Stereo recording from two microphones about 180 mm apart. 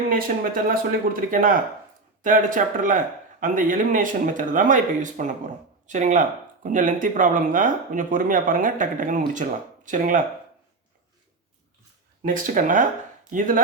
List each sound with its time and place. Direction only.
0.1 s speech: 50° right (ahead or behind)
12.2 s speech: 50° right (ahead or behind)